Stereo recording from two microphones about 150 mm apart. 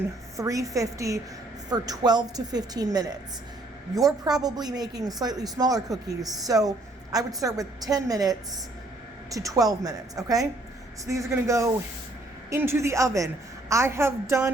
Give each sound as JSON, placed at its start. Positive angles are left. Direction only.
{"t": 0.3, "sound": "a woman's voice", "side_deg": -20}